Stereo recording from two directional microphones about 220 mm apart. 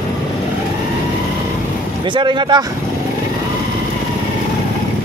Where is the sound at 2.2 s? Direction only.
20° right (ahead or behind).